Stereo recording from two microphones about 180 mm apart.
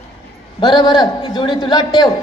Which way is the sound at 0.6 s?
25° left (ahead or behind).